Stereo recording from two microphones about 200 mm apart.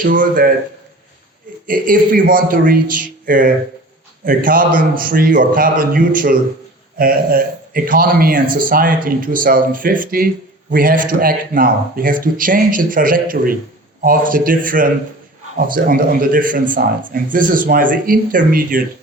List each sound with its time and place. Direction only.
0.0 s a man's voice: 45° right (ahead or behind)
1.6 s a man's voice: 45° right (ahead or behind)